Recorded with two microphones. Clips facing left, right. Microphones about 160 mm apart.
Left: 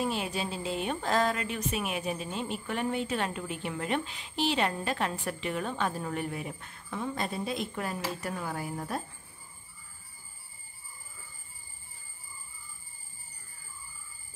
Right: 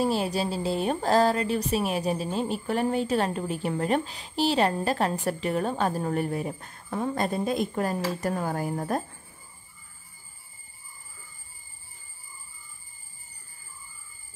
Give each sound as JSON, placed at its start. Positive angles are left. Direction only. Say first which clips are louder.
{"t": 0.0, "sound": "speech", "louder": "right 6 dB", "side_deg": -35}